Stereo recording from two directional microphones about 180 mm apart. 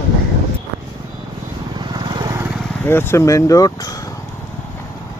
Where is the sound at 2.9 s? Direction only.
15° left (ahead or behind).